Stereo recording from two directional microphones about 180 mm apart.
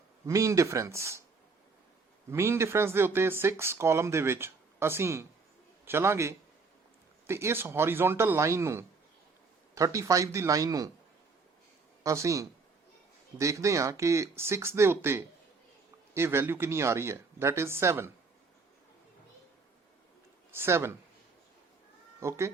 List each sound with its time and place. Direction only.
0.3 s speech: 15° right (ahead or behind)
2.3 s speech: 15° right (ahead or behind)
12.0 s speech: 15° right (ahead or behind)
20.6 s speech: 15° right (ahead or behind)
22.2 s speech: 15° right (ahead or behind)